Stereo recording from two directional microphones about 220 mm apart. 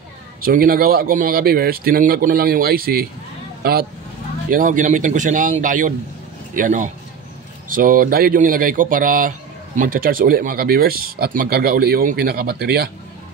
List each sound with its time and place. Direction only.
0.4 s speech: 40° right (ahead or behind)
4.5 s speech: 35° right (ahead or behind)